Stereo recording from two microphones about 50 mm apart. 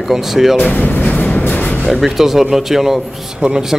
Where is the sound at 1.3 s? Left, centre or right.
Left.